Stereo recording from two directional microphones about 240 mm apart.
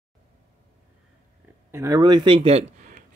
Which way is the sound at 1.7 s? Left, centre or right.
Centre.